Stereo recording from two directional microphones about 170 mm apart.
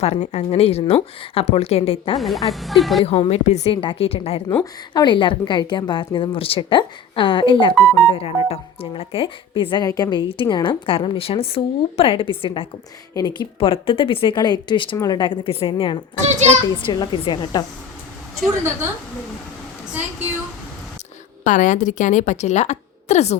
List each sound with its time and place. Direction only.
0.0 s speech: 40° left (ahead or behind)
2.1 s speech: centre (ahead or behind)
3.0 s a woman's voice: 35° left (ahead or behind)
16.2 s a child's voice: 40° right (ahead or behind)
16.6 s a woman's voice: 25° left (ahead or behind)
21.4 s a woman's voice: 50° left (ahead or behind)